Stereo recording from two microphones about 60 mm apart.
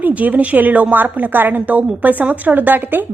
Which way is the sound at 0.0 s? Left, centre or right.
Right.